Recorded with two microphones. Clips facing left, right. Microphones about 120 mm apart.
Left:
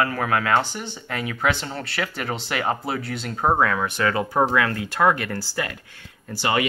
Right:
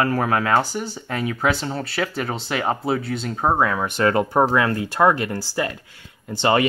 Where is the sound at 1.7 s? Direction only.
25° right (ahead or behind).